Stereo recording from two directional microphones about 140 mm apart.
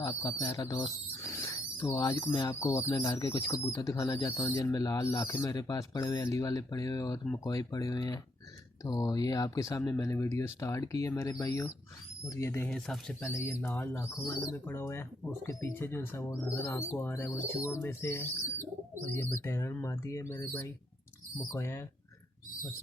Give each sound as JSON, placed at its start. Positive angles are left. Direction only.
{"t": 0.0, "sound": "speech", "side_deg": 25}
{"t": 0.8, "sound": "squeal", "side_deg": 20}
{"t": 1.9, "sound": "speech", "side_deg": 20}
{"t": 12.6, "sound": "speech", "side_deg": 5}
{"t": 13.2, "sound": "speech", "side_deg": 20}